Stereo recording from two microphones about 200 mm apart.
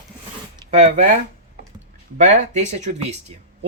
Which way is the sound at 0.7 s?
35° right (ahead or behind).